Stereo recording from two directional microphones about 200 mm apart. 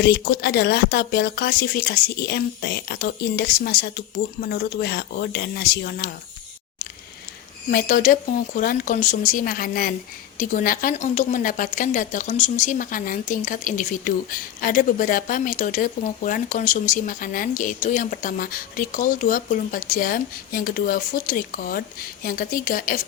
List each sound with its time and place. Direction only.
0.0 s a woman's voice: 55° left (ahead or behind)
7.7 s a woman's voice: 45° left (ahead or behind)